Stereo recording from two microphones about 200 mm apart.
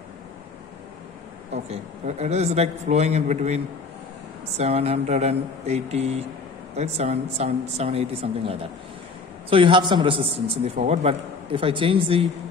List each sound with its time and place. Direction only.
1.5 s a man's voice: 35° right (ahead or behind)